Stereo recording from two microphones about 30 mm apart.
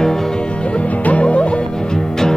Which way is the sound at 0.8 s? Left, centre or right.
Left.